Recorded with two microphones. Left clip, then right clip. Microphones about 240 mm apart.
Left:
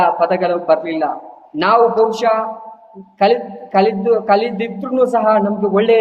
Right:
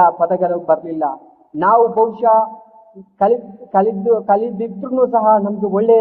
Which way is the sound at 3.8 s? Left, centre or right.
Centre.